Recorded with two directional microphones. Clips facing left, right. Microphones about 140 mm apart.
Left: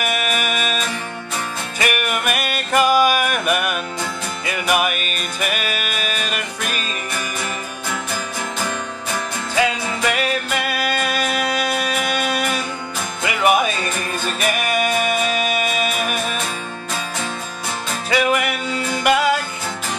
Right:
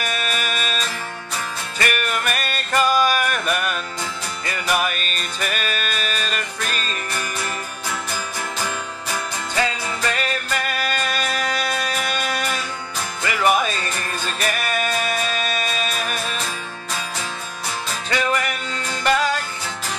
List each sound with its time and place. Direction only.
0.0 s music: 10° left (ahead or behind)
9.6 s music: 15° left (ahead or behind)
18.1 s music: 10° left (ahead or behind)